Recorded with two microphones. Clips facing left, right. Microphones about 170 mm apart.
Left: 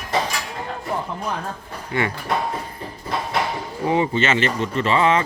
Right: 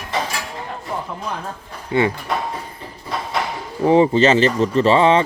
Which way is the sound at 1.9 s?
25° right (ahead or behind).